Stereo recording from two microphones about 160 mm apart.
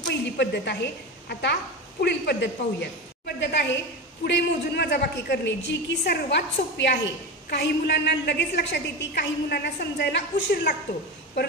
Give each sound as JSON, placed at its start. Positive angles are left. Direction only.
{"t": 0.0, "sound": "a sound", "side_deg": 90}
{"t": 1.3, "sound": "a woman's voice", "side_deg": 90}
{"t": 4.2, "sound": "a woman's voice", "side_deg": 90}